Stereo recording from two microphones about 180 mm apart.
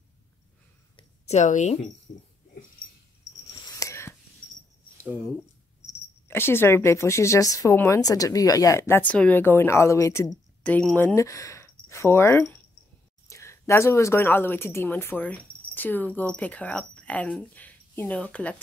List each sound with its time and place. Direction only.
0.9 s a sound: 35° left (ahead or behind)
3.5 s whispering: 20° left (ahead or behind)
6.2 s speech: 15° left (ahead or behind)
10.6 s speech: 5° left (ahead or behind)
11.1 s speech: 15° left (ahead or behind)